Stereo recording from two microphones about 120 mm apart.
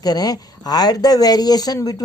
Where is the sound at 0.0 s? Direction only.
35° left (ahead or behind).